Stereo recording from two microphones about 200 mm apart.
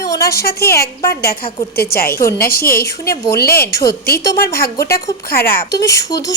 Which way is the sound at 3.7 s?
50° left (ahead or behind).